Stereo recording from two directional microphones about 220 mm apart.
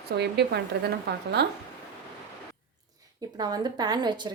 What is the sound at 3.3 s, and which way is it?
Speech, 20° right (ahead or behind).